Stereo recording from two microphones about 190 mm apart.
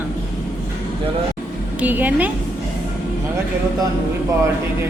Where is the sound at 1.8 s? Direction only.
10° right (ahead or behind).